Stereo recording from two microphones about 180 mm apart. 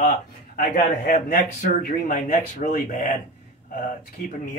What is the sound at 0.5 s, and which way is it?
Speech, 50° left (ahead or behind).